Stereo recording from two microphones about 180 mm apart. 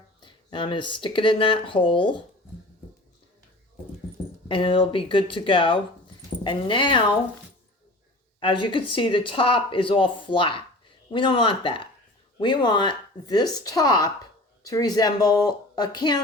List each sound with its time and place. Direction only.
0.2 s speech: 25° left (ahead or behind)
4.4 s speech: 30° left (ahead or behind)
8.4 s speech: 30° left (ahead or behind)